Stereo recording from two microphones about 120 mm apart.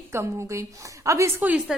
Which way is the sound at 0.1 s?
25° right (ahead or behind).